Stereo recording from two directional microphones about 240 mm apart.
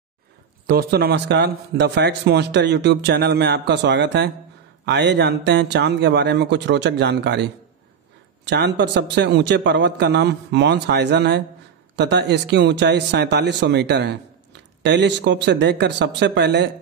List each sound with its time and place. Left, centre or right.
0.7 s speech: right
8.5 s speech: right